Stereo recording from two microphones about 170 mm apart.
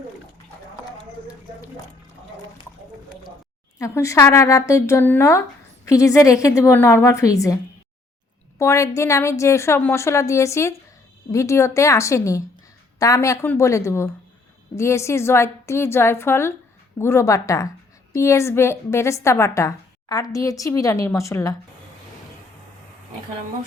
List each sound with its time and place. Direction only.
3.8 s a woman's voice: 20° left (ahead or behind)